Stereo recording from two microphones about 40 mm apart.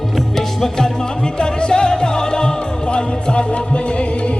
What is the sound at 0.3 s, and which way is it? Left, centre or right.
Music, centre.